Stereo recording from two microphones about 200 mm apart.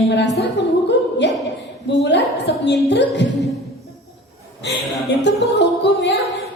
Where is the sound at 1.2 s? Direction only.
60° left (ahead or behind).